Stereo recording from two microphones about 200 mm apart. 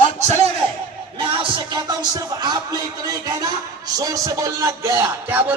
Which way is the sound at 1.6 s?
20° right (ahead or behind).